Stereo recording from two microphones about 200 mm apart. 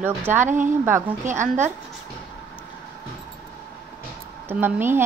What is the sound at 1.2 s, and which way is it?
Speech, 40° right (ahead or behind).